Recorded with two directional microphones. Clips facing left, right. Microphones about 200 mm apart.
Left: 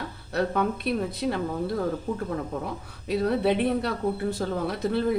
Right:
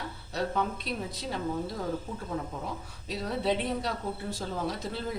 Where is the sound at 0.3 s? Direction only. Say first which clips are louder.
Left 5 dB; 60° left (ahead or behind).